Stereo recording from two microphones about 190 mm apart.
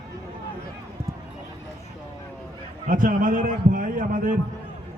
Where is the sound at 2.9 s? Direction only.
45° right (ahead or behind).